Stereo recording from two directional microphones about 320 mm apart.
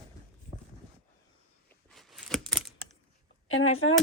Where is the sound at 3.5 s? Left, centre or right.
Left.